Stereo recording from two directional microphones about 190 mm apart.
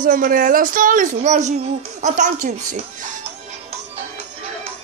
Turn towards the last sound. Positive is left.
turn(degrees=-40)  # may be behind; listen again after turning